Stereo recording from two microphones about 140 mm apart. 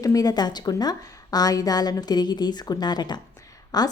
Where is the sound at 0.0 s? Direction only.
25° left (ahead or behind).